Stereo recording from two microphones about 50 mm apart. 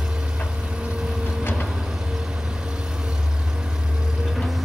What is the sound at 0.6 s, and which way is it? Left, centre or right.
Vehicle, centre.